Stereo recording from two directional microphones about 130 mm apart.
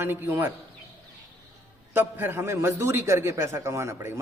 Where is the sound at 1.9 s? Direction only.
15° right (ahead or behind).